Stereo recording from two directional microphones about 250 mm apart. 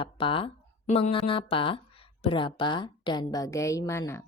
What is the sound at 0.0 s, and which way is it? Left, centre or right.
Speech, centre.